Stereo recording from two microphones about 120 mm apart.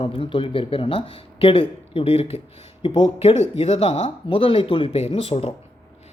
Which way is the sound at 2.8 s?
40° left (ahead or behind).